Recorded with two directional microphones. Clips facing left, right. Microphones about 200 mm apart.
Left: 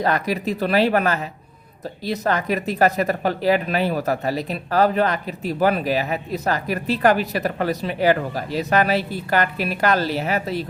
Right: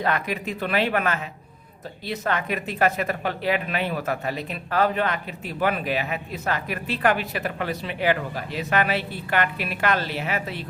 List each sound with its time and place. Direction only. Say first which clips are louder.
0.0 s speech: left 4 dB; 35° left (ahead or behind)